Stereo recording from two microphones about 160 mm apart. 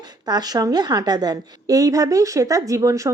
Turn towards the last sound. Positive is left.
turn(degrees=-20)  # may be behind; listen again after turning